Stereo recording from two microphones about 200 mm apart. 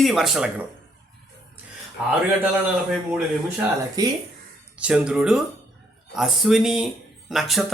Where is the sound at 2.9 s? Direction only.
Centre (ahead or behind).